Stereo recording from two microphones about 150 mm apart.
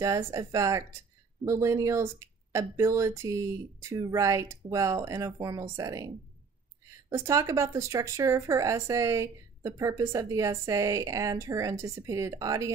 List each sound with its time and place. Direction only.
0.0 s speech: 20° right (ahead or behind)